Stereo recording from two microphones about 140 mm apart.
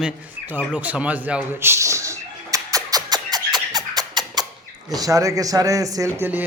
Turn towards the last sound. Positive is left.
turn(degrees=-15)  # may be behind; listen again after turning